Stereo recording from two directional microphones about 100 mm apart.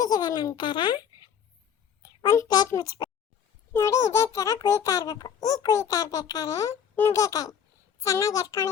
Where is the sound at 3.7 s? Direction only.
30° left (ahead or behind).